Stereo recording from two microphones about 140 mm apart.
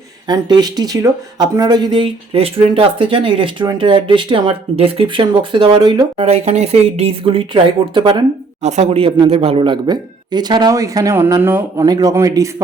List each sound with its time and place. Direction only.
0.3 s speech: 30° right (ahead or behind)
6.2 s speech: 50° right (ahead or behind); by 8.2 s 35° right (ahead or behind)
8.6 s speech: 55° right (ahead or behind); by 11.9 s 15° right (ahead or behind)
11.9 s speech: 30° right (ahead or behind)